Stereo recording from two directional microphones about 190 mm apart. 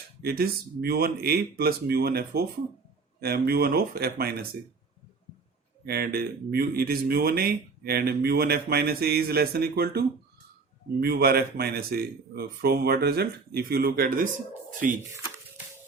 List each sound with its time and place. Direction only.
0.2 s speech: 55° right (ahead or behind)
5.8 s speech: 55° right (ahead or behind)
15.1 s a sound: 15° right (ahead or behind)